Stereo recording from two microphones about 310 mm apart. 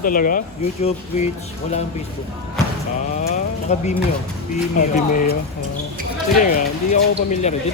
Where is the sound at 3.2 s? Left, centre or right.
Left.